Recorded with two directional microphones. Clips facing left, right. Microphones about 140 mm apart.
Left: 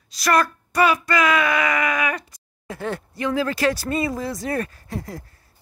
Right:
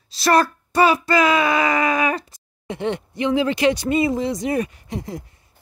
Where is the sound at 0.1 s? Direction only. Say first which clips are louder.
Right 3 dB; 30° right (ahead or behind).